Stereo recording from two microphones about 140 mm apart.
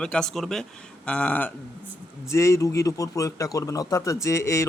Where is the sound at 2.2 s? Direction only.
20° left (ahead or behind).